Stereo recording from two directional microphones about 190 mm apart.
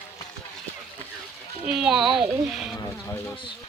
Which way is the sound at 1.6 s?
5° right (ahead or behind).